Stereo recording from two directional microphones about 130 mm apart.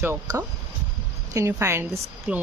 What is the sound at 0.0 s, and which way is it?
Speech, 25° right (ahead or behind).